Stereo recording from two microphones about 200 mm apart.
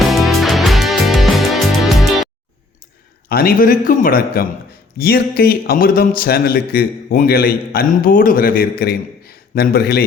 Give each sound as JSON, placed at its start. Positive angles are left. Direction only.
{"t": 0.1, "sound": "music", "side_deg": 0}
{"t": 3.2, "sound": "a man's voice", "side_deg": 50}